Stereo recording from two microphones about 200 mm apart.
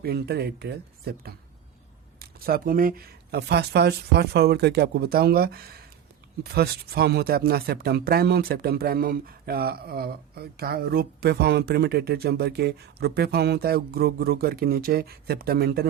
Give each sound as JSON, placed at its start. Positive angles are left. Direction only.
{"t": 0.0, "sound": "speech", "side_deg": -55}